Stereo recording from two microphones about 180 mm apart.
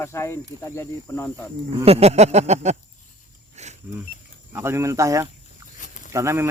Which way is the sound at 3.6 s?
40° right (ahead or behind).